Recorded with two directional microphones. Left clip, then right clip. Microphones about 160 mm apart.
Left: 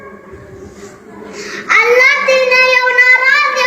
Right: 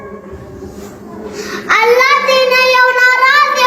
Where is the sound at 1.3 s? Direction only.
30° right (ahead or behind).